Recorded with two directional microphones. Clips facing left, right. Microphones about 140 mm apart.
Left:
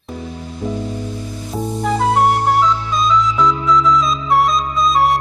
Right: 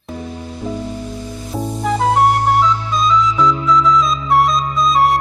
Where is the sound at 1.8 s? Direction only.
Centre (ahead or behind).